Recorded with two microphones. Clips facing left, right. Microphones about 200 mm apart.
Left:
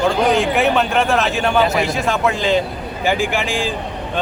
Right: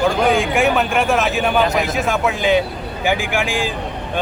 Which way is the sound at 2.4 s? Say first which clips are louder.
Right 4 dB; 15° right (ahead or behind).